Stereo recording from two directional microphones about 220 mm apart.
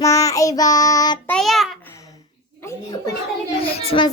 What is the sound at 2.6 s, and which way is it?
Speech, 10° left (ahead or behind).